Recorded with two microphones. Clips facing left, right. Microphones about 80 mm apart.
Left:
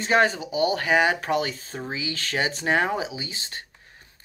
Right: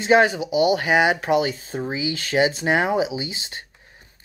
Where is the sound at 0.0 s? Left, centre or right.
Centre.